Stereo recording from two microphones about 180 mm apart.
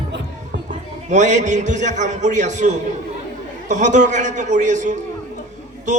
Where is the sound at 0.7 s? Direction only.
40° right (ahead or behind).